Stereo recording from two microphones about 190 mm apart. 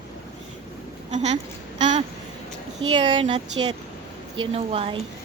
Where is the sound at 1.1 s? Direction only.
35° right (ahead or behind).